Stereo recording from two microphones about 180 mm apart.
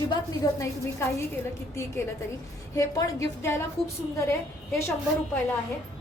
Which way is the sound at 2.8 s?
15° left (ahead or behind).